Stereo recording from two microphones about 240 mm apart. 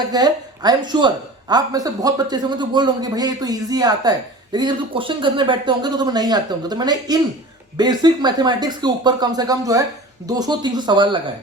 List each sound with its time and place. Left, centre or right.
0.1 s a woman's voice: centre